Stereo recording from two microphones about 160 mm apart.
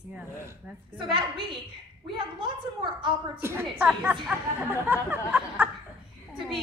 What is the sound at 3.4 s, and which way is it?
Speech, 15° right (ahead or behind).